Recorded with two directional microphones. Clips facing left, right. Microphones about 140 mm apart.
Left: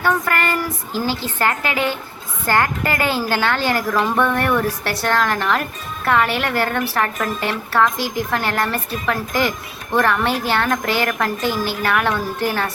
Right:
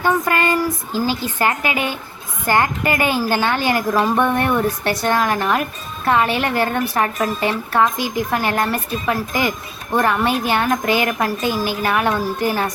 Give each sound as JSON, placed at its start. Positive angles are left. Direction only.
{"t": 0.0, "sound": "a woman's voice", "side_deg": -15}